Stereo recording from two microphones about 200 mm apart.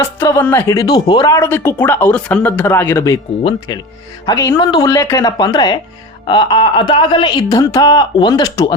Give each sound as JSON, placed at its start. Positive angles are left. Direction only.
{"t": 0.0, "sound": "speech", "side_deg": 15}